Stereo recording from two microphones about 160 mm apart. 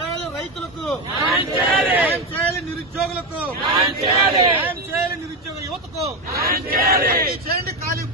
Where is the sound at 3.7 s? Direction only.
35° right (ahead or behind).